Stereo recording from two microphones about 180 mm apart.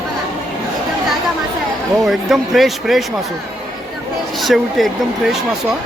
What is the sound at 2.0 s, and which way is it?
Speech, centre (ahead or behind).